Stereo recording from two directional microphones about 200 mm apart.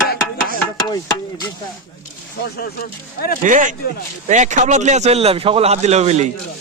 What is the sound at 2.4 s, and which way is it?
Speech, 50° left (ahead or behind).